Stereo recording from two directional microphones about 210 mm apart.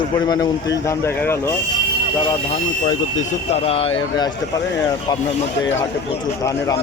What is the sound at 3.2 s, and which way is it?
Speech, 30° left (ahead or behind).